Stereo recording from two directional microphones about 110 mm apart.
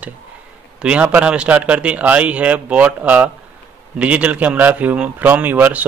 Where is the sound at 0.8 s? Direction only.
15° right (ahead or behind).